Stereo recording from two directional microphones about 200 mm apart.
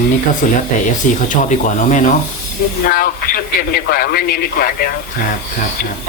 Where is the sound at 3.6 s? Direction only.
50° left (ahead or behind).